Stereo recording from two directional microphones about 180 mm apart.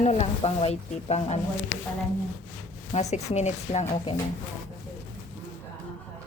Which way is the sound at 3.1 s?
40° left (ahead or behind).